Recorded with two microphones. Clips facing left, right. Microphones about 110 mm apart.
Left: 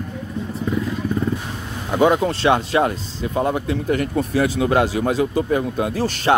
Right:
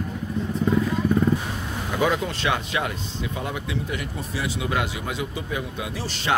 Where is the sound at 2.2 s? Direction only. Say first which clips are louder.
Left 8 dB; 35° left (ahead or behind); by 6.2 s 50° left (ahead or behind).